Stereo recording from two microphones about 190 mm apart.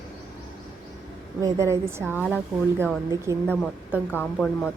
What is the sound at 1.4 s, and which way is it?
A woman's voice, 15° right (ahead or behind).